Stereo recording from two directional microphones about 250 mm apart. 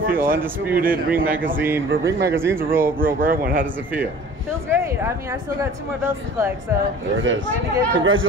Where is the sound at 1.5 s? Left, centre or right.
Centre.